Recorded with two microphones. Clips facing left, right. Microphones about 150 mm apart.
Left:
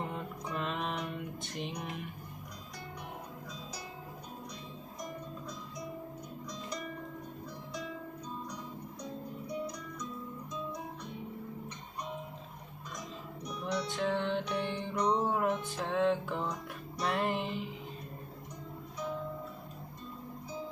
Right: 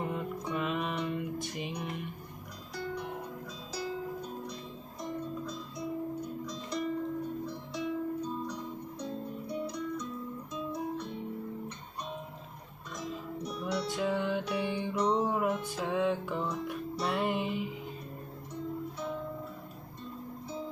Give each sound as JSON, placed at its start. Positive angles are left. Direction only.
{"t": 0.0, "sound": "music", "side_deg": -5}
{"t": 2.7, "sound": "music", "side_deg": -30}
{"t": 6.4, "sound": "music", "side_deg": -30}
{"t": 9.0, "sound": "music", "side_deg": -30}
{"t": 13.5, "sound": "music", "side_deg": -5}